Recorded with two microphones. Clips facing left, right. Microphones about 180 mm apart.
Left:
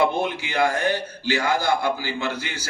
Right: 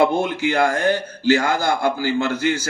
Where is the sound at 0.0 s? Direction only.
55° right (ahead or behind).